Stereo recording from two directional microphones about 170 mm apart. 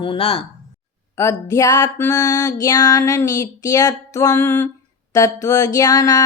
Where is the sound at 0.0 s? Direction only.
35° left (ahead or behind).